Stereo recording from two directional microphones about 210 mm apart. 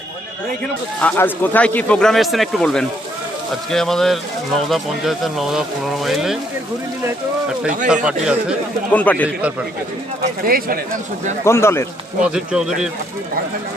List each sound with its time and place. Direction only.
1.0 s a man's voice: 10° left (ahead or behind)
7.9 s a man's voice: 5° right (ahead or behind)
8.9 s speech: 5° left (ahead or behind)
10.4 s speech: 45° right (ahead or behind)
11.4 s speech: 10° left (ahead or behind)
12.2 s a man's voice: 5° right (ahead or behind)